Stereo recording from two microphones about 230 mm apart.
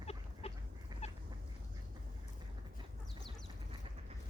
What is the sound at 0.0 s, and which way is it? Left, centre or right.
Duck, left.